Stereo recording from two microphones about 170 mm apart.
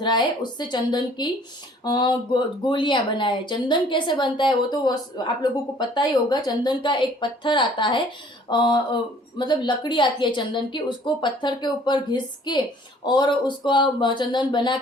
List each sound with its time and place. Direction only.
0.0 s speech: 25° left (ahead or behind)